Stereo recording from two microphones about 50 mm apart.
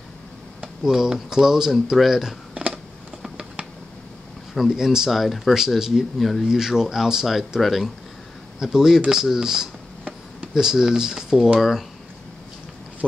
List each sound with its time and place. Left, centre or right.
0.6 s speech: centre
2.5 s typing: right
3.2 s a sound: centre
4.6 s speech: centre
6.4 s speech: centre